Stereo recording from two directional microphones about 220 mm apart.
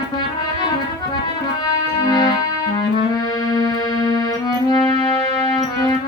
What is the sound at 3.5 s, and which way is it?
Music, 15° left (ahead or behind).